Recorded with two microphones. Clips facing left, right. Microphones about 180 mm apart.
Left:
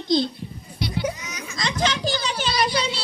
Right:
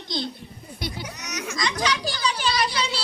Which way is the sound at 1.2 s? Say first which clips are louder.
Right 4 dB; 75° right (ahead or behind).